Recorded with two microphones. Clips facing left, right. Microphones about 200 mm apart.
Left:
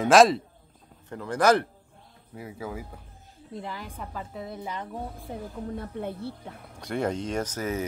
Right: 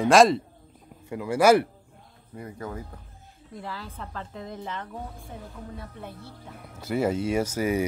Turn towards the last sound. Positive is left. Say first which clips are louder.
# right 5 dB
turn(degrees=-10)  # may be behind; listen again after turning